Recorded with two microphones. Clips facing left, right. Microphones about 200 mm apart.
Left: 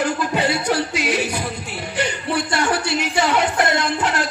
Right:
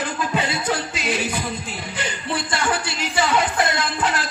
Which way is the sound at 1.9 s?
65° left (ahead or behind).